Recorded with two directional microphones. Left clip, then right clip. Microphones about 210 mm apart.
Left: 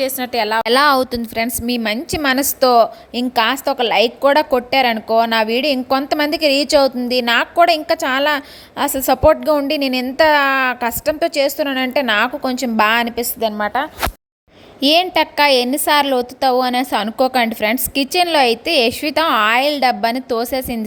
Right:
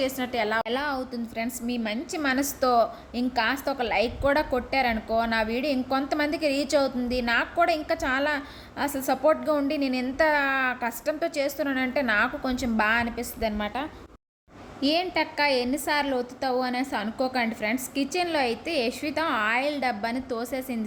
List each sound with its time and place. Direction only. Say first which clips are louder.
0.0 s a woman's voice: left 8 dB; 40° left (ahead or behind)
14.8 s a woman's voice: left 11 dB; 40° left (ahead or behind)